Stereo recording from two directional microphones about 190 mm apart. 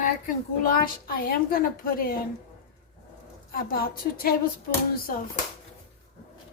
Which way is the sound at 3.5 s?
50° left (ahead or behind).